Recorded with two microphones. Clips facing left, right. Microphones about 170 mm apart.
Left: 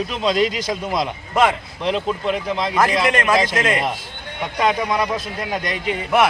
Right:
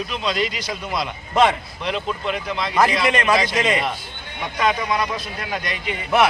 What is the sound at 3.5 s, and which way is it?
A man's voice, 5° left (ahead or behind).